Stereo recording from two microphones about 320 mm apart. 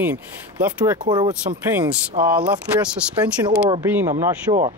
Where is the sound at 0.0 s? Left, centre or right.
Centre.